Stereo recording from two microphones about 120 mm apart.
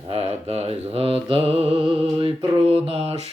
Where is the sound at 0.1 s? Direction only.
55° right (ahead or behind).